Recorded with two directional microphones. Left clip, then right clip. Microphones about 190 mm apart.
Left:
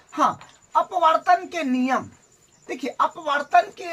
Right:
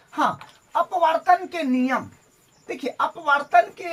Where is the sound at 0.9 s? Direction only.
10° left (ahead or behind).